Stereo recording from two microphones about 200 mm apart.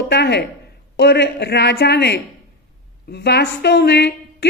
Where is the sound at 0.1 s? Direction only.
55° left (ahead or behind).